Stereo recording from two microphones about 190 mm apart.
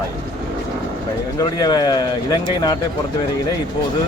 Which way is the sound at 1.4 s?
20° left (ahead or behind).